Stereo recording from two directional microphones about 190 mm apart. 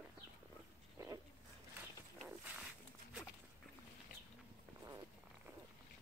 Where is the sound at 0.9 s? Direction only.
20° right (ahead or behind).